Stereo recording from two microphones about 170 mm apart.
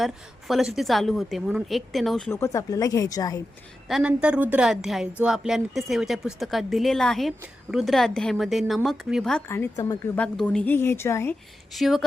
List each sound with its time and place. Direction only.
0.0 s speech: centre (ahead or behind)
2.3 s speech: 15° left (ahead or behind)
3.8 s speech: 5° right (ahead or behind)
9.5 s a woman's voice: 15° left (ahead or behind)
10.2 s a woman's voice: 5° left (ahead or behind)
11.7 s speech: centre (ahead or behind)